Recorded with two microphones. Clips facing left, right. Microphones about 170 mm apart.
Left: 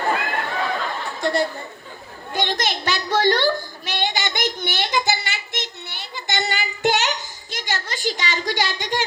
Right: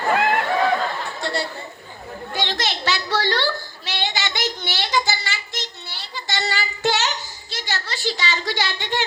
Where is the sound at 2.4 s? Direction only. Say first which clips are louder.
Left 1 dB; 45° left (ahead or behind).